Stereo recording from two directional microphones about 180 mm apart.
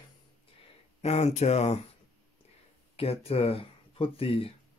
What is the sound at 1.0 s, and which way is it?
Speech, 40° left (ahead or behind).